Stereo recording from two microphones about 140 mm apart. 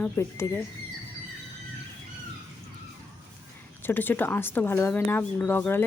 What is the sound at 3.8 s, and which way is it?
Speech, 15° left (ahead or behind).